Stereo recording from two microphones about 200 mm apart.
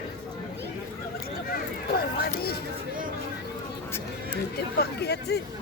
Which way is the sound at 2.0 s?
50° left (ahead or behind).